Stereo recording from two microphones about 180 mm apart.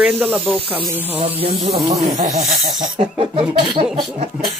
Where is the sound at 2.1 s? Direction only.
45° right (ahead or behind).